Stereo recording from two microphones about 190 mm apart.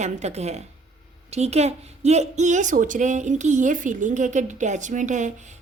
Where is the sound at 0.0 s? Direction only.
35° right (ahead or behind).